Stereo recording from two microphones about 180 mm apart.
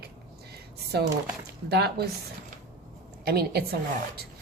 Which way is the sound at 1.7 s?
65° right (ahead or behind).